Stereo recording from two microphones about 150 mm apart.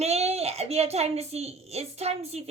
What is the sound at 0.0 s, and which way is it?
Speech, 45° right (ahead or behind).